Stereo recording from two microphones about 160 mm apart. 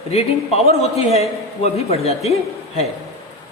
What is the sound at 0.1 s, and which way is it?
A man's voice, 40° left (ahead or behind).